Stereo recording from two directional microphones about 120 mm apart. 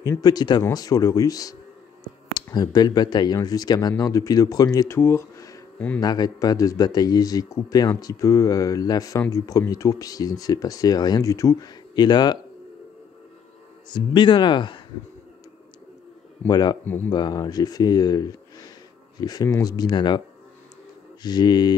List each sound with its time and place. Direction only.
0.0 s speech: 30° left (ahead or behind)
13.8 s speech: 40° left (ahead or behind)
16.4 s speech: 35° left (ahead or behind)
16.8 s speech: 15° left (ahead or behind)
17.1 s speech: 35° left (ahead or behind)
21.2 s speech: 35° left (ahead or behind)